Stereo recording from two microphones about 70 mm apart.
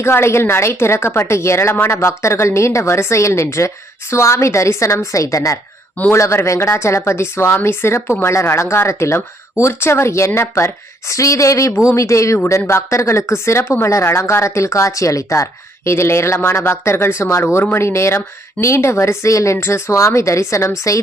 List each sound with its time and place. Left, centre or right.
0.0 s speech: left